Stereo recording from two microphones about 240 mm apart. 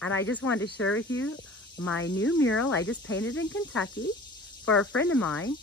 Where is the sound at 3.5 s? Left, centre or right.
Centre.